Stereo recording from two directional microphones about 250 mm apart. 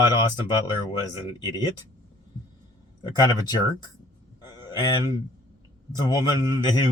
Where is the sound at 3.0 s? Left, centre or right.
Centre.